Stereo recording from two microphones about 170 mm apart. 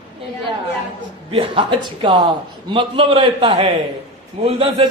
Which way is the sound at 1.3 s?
30° right (ahead or behind).